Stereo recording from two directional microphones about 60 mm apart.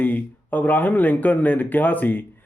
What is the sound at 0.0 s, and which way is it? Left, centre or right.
Speech, left.